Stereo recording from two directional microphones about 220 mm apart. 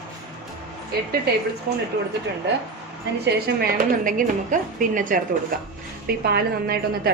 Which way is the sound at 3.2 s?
45° right (ahead or behind).